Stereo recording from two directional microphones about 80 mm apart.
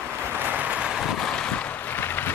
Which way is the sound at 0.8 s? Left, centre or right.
Centre.